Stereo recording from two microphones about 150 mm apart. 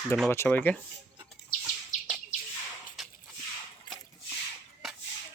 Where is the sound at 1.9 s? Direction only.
55° left (ahead or behind).